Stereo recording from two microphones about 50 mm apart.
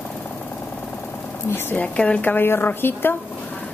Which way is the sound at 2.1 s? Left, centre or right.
Left.